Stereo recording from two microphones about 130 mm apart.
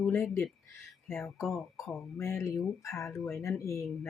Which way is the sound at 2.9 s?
20° left (ahead or behind).